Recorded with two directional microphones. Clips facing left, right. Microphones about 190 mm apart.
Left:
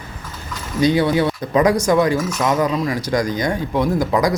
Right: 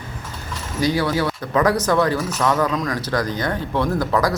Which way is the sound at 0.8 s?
20° left (ahead or behind).